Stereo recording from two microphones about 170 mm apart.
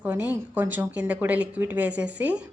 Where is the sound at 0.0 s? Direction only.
10° right (ahead or behind).